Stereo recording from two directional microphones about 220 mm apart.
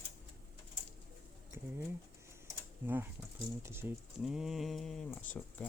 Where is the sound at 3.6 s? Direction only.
10° right (ahead or behind).